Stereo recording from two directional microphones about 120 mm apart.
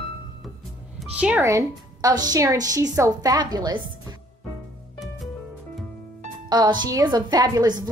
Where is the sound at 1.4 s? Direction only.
30° right (ahead or behind).